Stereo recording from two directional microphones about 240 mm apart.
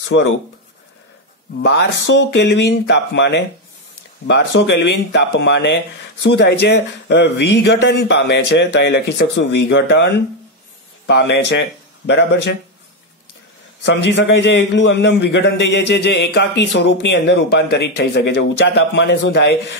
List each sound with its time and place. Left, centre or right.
0.1 s a man's voice: left
1.6 s a man's voice: left
13.8 s a man's voice: left